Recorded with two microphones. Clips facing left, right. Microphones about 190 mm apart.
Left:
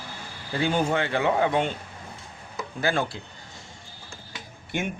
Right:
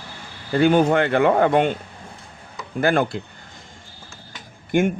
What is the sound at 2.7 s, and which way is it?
Speech, 55° right (ahead or behind).